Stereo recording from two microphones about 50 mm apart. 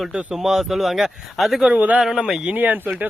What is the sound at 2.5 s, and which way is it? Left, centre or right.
Speech, right.